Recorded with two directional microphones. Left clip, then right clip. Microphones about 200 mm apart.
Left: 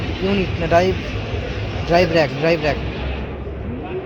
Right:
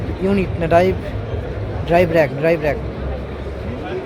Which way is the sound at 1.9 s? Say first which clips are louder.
Right 1 dB; 10° right (ahead or behind).